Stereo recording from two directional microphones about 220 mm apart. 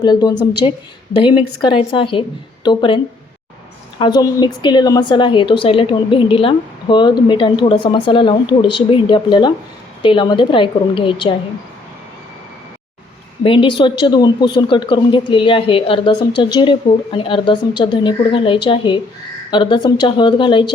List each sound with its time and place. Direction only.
0.0 s a woman's voice: 20° left (ahead or behind)
13.4 s a woman's voice: 25° left (ahead or behind)